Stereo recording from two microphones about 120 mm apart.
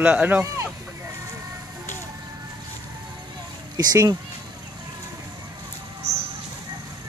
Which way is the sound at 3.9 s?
35° right (ahead or behind).